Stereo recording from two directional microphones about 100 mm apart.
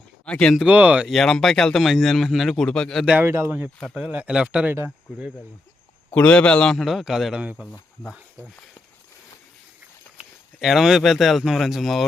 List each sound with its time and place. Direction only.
0.3 s speech: 10° left (ahead or behind)
0.5 s speech: 10° right (ahead or behind)
1.0 s speech: centre (ahead or behind)
3.2 s speech: 25° right (ahead or behind)
3.9 s speech: 10° right (ahead or behind)
6.1 s speech: 15° left (ahead or behind); by 7.4 s 5° right (ahead or behind)
10.6 s speech: 5° right (ahead or behind)